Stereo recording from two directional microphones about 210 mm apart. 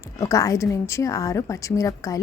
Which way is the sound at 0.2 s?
15° left (ahead or behind).